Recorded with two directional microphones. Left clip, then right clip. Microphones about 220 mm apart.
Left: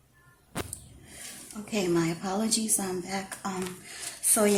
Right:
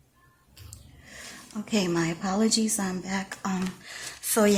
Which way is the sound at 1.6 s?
35° right (ahead or behind).